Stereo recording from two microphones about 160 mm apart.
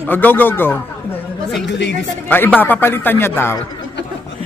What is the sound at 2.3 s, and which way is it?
A man's voice, 10° left (ahead or behind).